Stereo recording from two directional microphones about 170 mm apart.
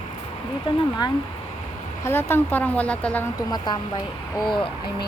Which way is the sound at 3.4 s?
25° left (ahead or behind).